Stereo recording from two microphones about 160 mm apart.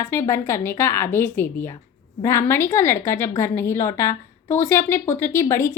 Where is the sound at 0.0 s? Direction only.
20° left (ahead or behind).